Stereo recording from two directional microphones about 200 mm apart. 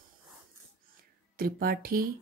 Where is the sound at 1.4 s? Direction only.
45° right (ahead or behind).